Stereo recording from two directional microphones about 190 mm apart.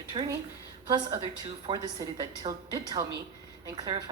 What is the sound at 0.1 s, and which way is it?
A woman's voice, 25° right (ahead or behind).